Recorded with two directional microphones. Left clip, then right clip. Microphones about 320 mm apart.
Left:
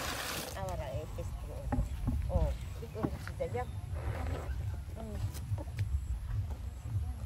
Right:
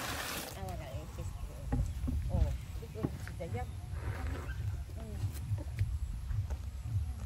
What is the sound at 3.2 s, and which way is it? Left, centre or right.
Roaring cats, centre.